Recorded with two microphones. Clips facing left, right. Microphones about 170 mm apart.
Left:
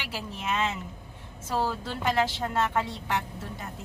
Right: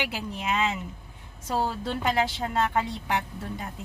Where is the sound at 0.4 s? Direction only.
10° right (ahead or behind).